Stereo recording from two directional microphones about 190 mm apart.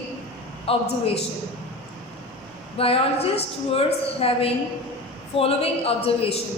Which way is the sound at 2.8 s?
30° left (ahead or behind).